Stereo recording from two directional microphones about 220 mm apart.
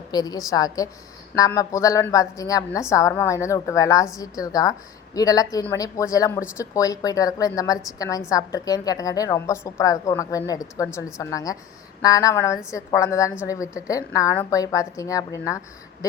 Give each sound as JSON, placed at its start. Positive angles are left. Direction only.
{"t": 0.1, "sound": "a woman's voice", "side_deg": 15}